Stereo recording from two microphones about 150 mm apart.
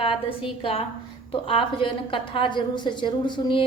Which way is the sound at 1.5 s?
35° left (ahead or behind).